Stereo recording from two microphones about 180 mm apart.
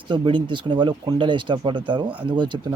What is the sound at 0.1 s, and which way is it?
Speech, 25° right (ahead or behind).